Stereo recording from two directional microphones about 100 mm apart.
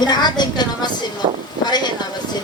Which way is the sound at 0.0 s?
45° left (ahead or behind).